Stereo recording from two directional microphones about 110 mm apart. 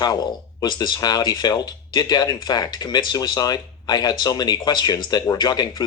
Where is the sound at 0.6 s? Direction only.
40° left (ahead or behind).